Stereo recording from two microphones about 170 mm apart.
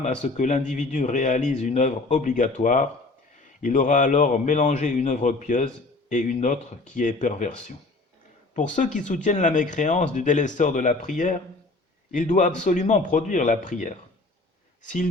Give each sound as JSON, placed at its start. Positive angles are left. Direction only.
{"t": 0.0, "sound": "speech", "side_deg": 45}